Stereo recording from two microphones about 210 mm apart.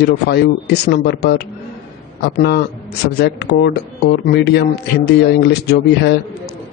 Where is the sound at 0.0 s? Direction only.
50° left (ahead or behind).